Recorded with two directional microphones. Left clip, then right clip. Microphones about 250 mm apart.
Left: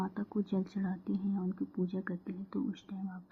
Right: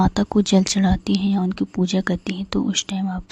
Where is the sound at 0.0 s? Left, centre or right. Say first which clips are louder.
Right 18 dB; right.